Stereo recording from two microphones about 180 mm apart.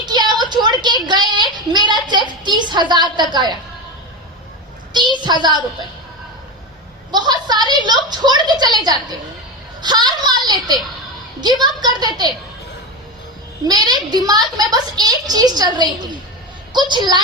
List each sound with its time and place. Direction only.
0.0 s a sound: 25° right (ahead or behind)
1.0 s child singing: 25° right (ahead or behind)
1.9 s a child's voice: 25° right (ahead or behind)
4.9 s a child's voice: 25° right (ahead or behind)
7.1 s a child's voice: 25° right (ahead or behind)
13.7 s a child's voice: 20° right (ahead or behind)